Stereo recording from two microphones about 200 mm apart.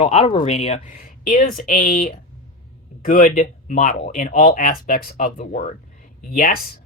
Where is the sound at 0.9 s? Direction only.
45° left (ahead or behind).